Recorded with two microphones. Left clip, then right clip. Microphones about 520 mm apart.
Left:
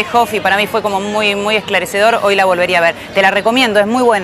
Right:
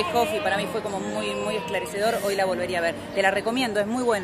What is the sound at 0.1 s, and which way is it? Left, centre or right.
Speech, left.